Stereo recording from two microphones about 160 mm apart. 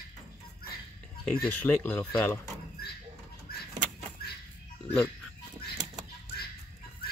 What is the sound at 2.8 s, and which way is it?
Door, 70° left (ahead or behind).